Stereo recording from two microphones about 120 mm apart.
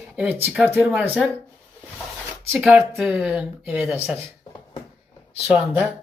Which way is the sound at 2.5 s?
Centre (ahead or behind).